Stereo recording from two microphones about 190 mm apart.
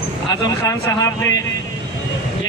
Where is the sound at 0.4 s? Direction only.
15° left (ahead or behind).